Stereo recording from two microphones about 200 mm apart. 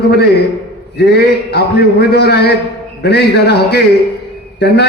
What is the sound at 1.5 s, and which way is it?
A man's voice, 55° left (ahead or behind).